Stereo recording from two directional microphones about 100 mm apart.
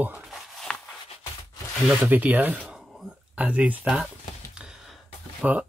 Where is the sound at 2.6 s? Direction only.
5° right (ahead or behind).